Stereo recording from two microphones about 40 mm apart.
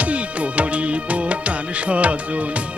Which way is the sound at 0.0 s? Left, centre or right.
Right.